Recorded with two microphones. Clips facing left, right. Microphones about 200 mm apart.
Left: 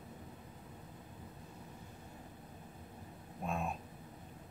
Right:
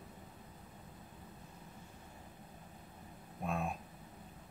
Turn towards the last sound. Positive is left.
turn(degrees=0)  # may be behind; listen again after turning